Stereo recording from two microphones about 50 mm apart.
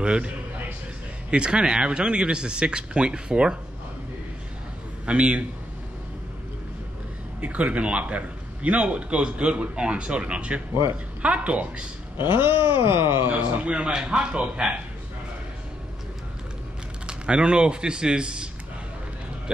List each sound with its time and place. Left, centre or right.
0.0 s a man's voice: right
1.3 s a man's voice: centre
5.0 s a man's voice: right
7.3 s a man's voice: right
12.2 s a sound: right
13.3 s a man's voice: right
17.0 s speech: centre